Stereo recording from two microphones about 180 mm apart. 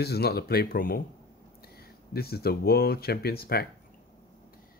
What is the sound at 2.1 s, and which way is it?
Speech, 60° left (ahead or behind).